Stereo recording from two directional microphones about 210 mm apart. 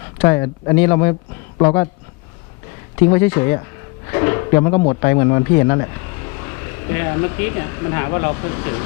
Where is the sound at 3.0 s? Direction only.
15° left (ahead or behind).